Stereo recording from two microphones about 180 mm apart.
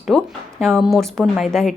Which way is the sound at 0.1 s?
Centre (ahead or behind).